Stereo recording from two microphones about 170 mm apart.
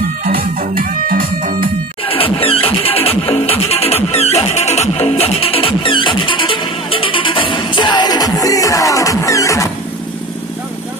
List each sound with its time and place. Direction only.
0.2 s music: 55° right (ahead or behind)
2.0 s music: 35° left (ahead or behind)